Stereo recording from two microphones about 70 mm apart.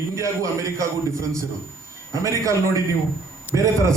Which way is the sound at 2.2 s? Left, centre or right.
Right.